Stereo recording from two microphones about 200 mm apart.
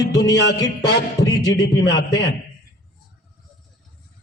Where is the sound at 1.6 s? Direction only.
60° left (ahead or behind).